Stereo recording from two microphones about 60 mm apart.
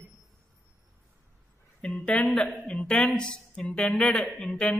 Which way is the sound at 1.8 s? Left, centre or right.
Centre.